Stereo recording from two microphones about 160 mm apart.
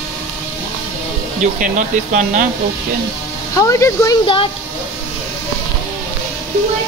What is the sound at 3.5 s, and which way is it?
Speech, 20° left (ahead or behind).